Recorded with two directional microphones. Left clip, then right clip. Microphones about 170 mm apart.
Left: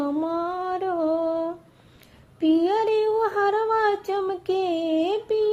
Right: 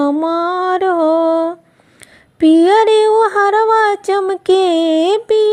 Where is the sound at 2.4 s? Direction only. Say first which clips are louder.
Right 12 dB; 45° right (ahead or behind).